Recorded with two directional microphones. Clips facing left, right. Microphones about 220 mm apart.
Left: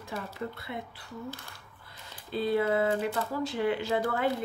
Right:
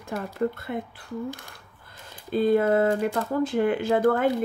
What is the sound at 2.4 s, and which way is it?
Speech, 50° right (ahead or behind).